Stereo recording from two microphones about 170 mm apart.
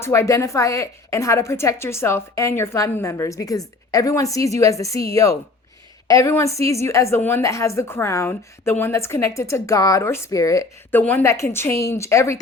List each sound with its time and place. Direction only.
0.0 s a woman's voice: 15° left (ahead or behind)